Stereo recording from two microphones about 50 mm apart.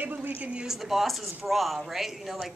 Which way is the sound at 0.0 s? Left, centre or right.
Right.